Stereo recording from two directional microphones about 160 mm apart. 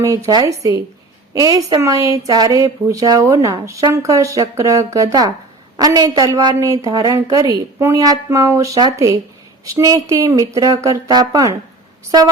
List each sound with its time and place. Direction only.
0.3 s a woman's voice: 25° right (ahead or behind)